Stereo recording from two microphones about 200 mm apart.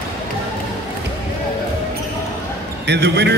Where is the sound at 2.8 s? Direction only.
55° right (ahead or behind).